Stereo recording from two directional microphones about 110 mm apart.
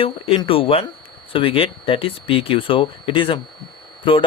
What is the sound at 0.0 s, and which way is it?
Speech, 55° left (ahead or behind).